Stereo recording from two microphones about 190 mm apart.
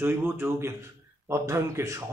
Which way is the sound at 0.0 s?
15° right (ahead or behind).